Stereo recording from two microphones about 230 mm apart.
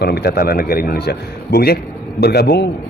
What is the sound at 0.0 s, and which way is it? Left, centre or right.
A man's voice, left.